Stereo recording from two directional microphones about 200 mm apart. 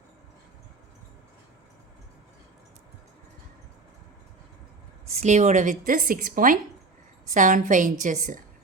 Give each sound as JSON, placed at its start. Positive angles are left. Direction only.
{"t": 5.2, "sound": "a woman's voice", "side_deg": -35}